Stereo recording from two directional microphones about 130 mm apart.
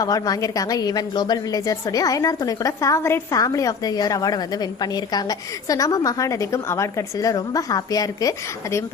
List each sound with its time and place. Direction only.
0.0 s a woman's voice: 30° left (ahead or behind)